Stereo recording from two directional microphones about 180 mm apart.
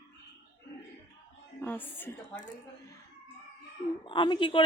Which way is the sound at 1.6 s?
10° left (ahead or behind).